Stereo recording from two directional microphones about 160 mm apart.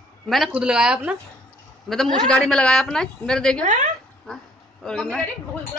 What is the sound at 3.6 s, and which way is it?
Speech, 50° right (ahead or behind).